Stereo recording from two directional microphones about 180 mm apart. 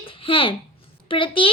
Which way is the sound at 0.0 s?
30° left (ahead or behind).